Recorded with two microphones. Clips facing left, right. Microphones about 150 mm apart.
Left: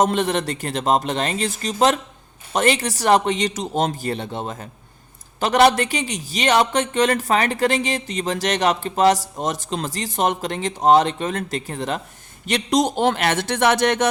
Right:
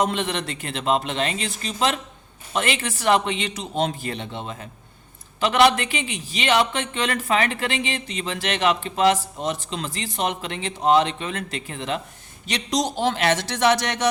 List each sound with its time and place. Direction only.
0.0 s a man's voice: 45° left (ahead or behind)
12.5 s speech: 55° left (ahead or behind)